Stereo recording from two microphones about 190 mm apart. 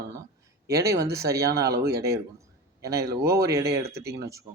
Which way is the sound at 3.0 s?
55° right (ahead or behind).